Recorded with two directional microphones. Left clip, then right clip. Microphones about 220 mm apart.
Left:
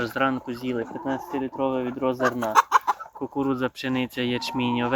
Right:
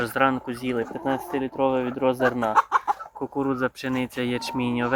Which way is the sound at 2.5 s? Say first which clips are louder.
Left 4 dB; 45° left (ahead or behind).